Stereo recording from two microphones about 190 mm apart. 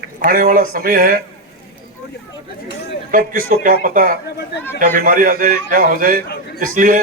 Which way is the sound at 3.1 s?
45° right (ahead or behind).